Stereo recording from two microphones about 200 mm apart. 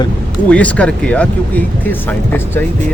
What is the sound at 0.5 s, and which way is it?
Speech, 5° left (ahead or behind).